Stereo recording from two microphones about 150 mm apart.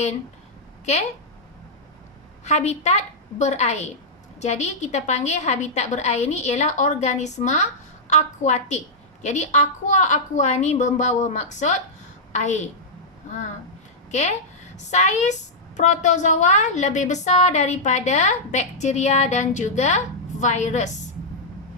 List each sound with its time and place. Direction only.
2.4 s a woman's voice: 50° left (ahead or behind)
14.1 s a woman's voice: 50° left (ahead or behind)